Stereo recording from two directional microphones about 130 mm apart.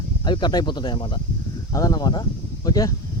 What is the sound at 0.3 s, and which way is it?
Speech, 35° left (ahead or behind).